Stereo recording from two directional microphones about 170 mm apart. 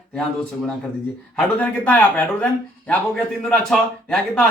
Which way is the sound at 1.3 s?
10° left (ahead or behind).